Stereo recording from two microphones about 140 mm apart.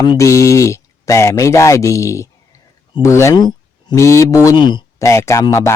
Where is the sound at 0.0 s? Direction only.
25° left (ahead or behind).